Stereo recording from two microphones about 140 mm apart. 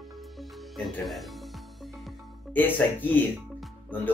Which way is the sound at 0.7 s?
Centre (ahead or behind).